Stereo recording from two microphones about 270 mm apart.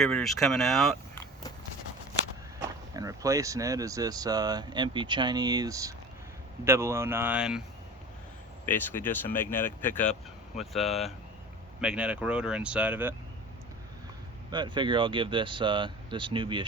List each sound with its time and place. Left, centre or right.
0.0 s speech: centre
2.9 s speech: centre
8.6 s speech: centre
14.5 s speech: centre